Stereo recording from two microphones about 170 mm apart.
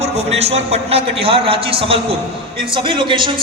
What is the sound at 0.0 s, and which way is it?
A man's voice, 40° right (ahead or behind).